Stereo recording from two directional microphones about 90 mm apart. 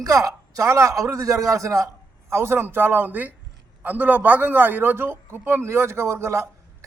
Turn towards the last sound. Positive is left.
turn(degrees=-35)  # may be behind; listen again after turning